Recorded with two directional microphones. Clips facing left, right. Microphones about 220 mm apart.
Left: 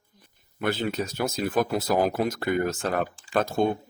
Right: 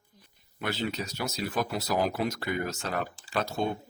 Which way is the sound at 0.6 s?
50° left (ahead or behind).